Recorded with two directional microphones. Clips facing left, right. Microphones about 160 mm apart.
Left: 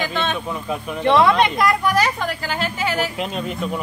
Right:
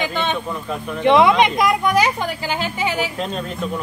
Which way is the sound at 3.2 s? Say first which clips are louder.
Even; 5° left (ahead or behind).